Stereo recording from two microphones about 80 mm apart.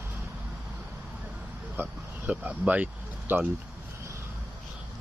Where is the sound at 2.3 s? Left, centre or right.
Centre.